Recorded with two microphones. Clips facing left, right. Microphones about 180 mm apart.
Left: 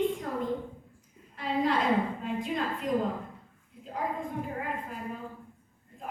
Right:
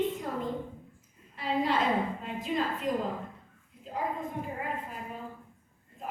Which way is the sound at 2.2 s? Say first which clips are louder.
Even; centre (ahead or behind).